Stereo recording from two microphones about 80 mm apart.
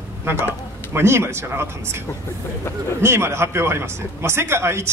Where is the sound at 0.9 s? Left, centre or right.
Right.